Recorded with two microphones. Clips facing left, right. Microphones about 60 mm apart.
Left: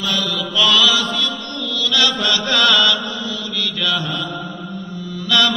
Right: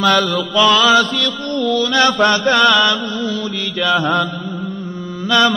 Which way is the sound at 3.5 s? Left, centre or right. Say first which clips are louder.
Right 4 dB; right.